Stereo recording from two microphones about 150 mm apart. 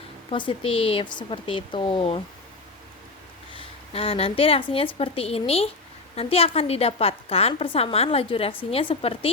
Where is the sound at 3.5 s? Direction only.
40° left (ahead or behind).